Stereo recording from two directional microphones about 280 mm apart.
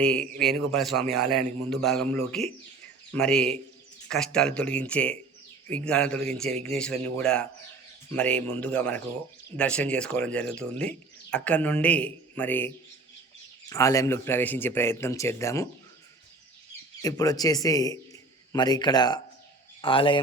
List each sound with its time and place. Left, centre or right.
0.0 s speech: centre
17.0 s speech: centre